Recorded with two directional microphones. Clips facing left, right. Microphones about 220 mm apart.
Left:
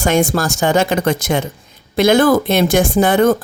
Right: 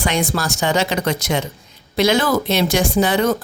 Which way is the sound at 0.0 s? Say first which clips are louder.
Left 6 dB; 45° left (ahead or behind).